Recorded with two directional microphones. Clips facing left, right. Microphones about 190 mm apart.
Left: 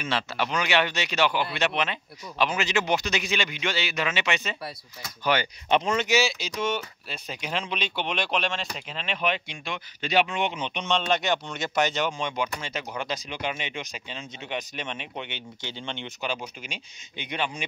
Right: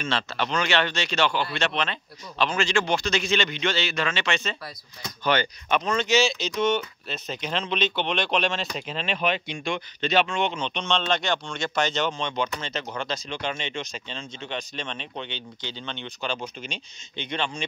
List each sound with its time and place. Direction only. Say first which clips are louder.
0.0 s speech: even; 10° left (ahead or behind)
5.7 s speech: left 2 dB; 25° left (ahead or behind)
6.0 s speech: right 2 dB; 10° left (ahead or behind)
8.4 s speech: right 3 dB; 30° right (ahead or behind)
9.5 s speech: right 6 dB; 5° left (ahead or behind)